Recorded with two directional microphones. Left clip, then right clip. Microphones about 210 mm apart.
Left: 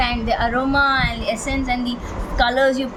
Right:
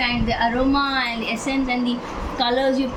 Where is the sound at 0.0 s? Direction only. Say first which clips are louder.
Left 1 dB; 65° left (ahead or behind).